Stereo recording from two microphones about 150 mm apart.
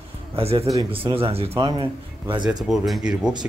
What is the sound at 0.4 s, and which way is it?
Speech, 40° right (ahead or behind).